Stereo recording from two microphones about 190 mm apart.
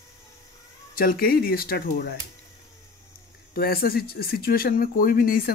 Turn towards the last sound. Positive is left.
turn(degrees=50)  # may be behind; listen again after turning